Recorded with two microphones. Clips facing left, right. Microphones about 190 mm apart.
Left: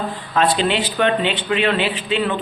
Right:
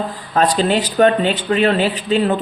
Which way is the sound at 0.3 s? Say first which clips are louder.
Right 2 dB; 40° right (ahead or behind).